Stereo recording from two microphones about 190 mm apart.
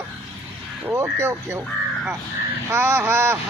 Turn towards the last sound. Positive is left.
turn(degrees=-10)  # may be behind; listen again after turning